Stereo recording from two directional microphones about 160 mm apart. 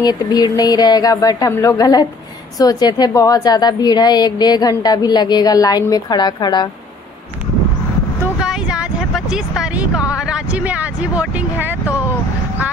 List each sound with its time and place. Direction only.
0.0 s a woman's voice: 25° left (ahead or behind)
8.4 s a sound: 5° right (ahead or behind)
10.1 s speech: 5° right (ahead or behind)